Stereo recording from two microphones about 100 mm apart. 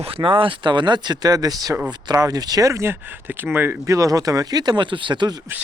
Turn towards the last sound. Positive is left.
turn(degrees=-50)  # may be behind; listen again after turning